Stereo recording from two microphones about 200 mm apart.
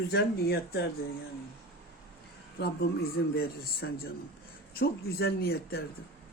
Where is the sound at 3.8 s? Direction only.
60° left (ahead or behind).